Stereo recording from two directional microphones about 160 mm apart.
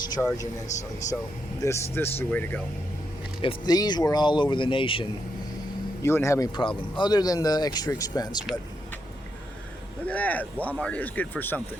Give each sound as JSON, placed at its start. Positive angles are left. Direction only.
{"t": 0.2, "sound": "a man's voice", "side_deg": 5}
{"t": 1.6, "sound": "a man's voice", "side_deg": 15}
{"t": 3.4, "sound": "speech", "side_deg": 25}
{"t": 6.0, "sound": "a man's voice", "side_deg": 15}
{"t": 6.6, "sound": "speech", "side_deg": 30}
{"t": 10.1, "sound": "a man's voice", "side_deg": 10}